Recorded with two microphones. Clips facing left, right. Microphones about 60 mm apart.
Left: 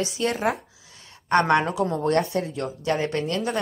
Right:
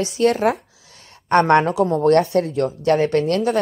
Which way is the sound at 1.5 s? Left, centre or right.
Right.